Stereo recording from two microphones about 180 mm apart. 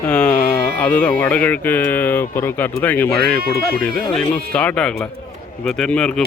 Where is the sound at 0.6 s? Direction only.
10° left (ahead or behind).